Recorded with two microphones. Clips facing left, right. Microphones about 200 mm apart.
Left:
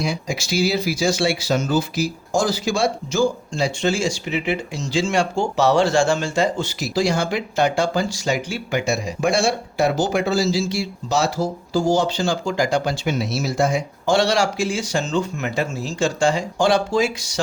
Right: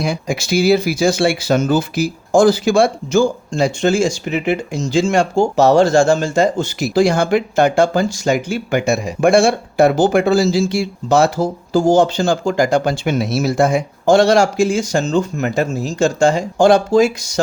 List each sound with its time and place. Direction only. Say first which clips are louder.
0.0 s speech: right 4 dB; 55° right (ahead or behind)